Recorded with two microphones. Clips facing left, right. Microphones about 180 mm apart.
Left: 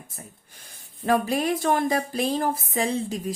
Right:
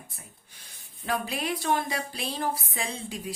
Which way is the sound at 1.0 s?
45° left (ahead or behind).